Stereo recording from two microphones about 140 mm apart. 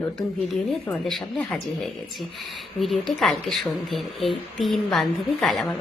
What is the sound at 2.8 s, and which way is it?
A woman's voice, centre (ahead or behind).